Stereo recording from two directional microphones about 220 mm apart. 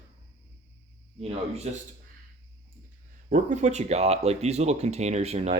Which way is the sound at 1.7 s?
30° right (ahead or behind).